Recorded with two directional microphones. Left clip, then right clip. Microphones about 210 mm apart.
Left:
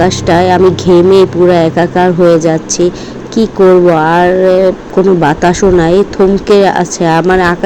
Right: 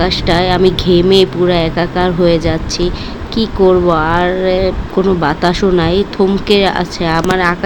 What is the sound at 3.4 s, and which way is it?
Speech, 25° left (ahead or behind).